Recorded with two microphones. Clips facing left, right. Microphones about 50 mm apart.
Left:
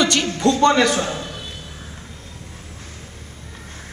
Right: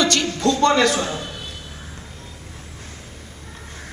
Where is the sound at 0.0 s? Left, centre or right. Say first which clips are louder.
Left 1 dB; centre.